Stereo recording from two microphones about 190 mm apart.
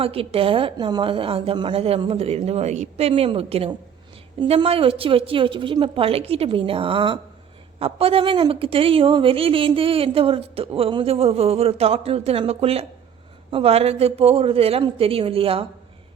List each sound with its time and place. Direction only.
0.0 s a woman's voice: 30° right (ahead or behind)